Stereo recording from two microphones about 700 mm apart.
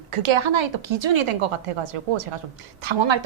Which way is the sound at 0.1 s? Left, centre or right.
Right.